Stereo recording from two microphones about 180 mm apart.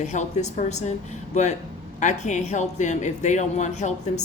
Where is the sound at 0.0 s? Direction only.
40° left (ahead or behind).